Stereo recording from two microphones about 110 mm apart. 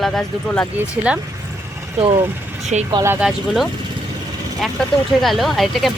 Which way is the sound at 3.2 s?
10° right (ahead or behind).